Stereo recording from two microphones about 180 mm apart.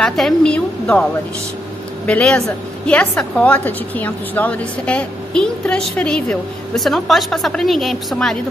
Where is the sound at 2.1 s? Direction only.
5° left (ahead or behind).